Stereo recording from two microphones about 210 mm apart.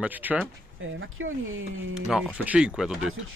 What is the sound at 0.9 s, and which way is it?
Speech, 70° right (ahead or behind).